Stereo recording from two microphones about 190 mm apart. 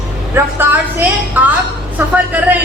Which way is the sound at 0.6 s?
10° right (ahead or behind).